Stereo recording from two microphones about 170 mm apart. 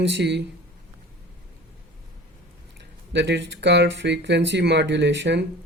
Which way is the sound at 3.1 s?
90° right.